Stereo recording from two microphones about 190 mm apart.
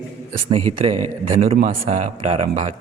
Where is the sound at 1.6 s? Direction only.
45° right (ahead or behind).